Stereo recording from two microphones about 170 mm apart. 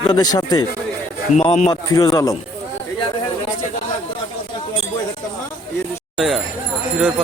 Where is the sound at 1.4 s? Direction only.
40° left (ahead or behind).